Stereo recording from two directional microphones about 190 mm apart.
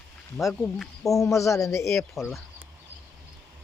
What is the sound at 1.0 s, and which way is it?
Speech, 15° left (ahead or behind).